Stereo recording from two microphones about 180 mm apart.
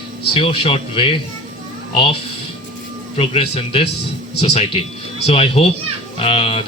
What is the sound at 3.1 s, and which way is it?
Speech, 35° left (ahead or behind).